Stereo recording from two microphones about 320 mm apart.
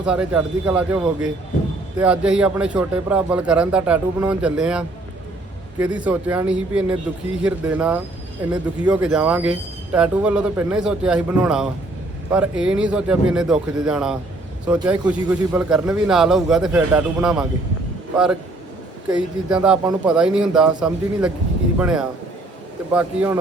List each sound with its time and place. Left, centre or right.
0.0 s speech: centre
19.1 s speech: centre